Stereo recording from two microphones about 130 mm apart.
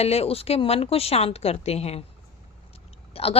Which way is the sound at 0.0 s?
50° left (ahead or behind).